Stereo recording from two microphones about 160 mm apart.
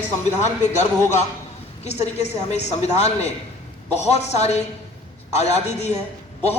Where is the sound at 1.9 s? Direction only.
45° left (ahead or behind).